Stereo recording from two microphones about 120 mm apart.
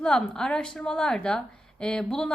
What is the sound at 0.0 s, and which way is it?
A woman's voice, 5° left (ahead or behind).